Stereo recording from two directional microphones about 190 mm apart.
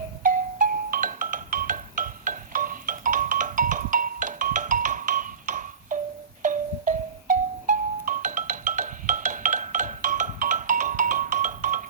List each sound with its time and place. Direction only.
0.2 s music: 45° right (ahead or behind)